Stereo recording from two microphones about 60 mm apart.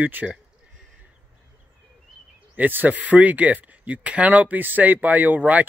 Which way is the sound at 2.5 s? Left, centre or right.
Right.